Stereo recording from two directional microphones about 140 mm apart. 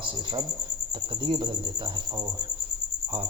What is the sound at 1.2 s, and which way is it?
Speech, 35° right (ahead or behind).